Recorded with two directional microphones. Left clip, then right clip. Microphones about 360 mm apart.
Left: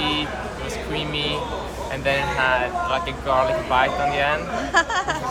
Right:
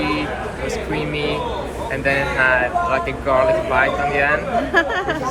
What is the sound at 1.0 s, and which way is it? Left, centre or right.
Speech, centre.